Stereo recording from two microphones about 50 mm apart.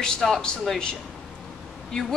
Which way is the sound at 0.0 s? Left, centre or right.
Centre.